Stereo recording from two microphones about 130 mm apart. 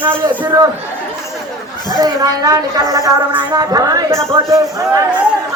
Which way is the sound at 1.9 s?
30° right (ahead or behind).